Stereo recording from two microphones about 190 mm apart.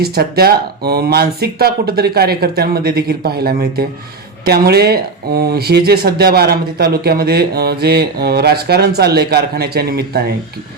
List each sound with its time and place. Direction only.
0.0 s speech: 55° right (ahead or behind)